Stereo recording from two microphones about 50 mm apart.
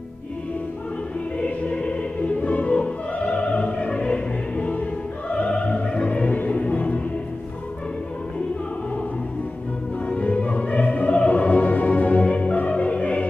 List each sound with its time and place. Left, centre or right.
1.4 s opera: left
10.0 s music: left